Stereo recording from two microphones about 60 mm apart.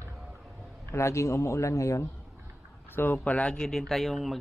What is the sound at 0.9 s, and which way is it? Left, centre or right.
A man's voice, left.